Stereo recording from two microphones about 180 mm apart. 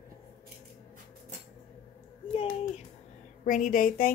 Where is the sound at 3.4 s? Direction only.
45° left (ahead or behind).